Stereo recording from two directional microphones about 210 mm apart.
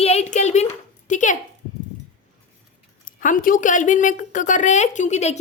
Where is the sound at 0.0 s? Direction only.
30° left (ahead or behind).